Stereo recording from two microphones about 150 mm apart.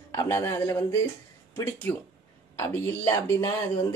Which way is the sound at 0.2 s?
20° left (ahead or behind).